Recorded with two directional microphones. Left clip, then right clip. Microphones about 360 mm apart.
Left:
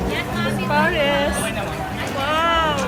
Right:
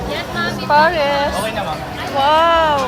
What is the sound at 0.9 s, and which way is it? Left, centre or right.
Speech, right.